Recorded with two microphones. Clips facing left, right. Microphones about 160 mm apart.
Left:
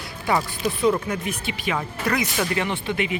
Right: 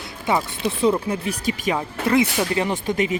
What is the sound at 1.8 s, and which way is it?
Speech, 25° right (ahead or behind).